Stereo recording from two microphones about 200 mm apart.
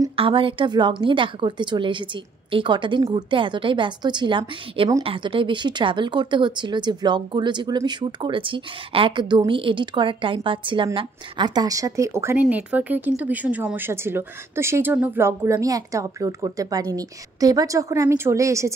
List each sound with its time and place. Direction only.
0.1 s a woman's voice: 25° right (ahead or behind)